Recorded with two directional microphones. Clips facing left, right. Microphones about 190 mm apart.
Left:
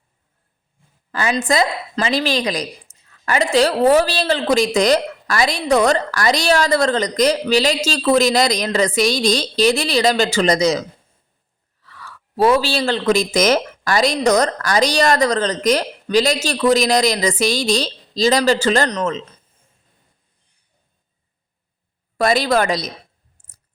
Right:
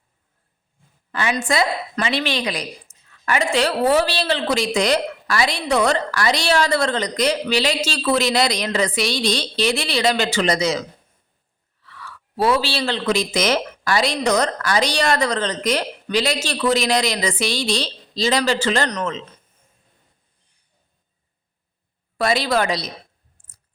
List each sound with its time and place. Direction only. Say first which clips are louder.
1.1 s a woman's voice: left 3 dB; 35° left (ahead or behind)
2.9 s a sound: even; 20° left (ahead or behind)
3.2 s a woman's voice: left 4 dB; 40° left (ahead or behind)
22.2 s speech: left 3 dB; 45° left (ahead or behind)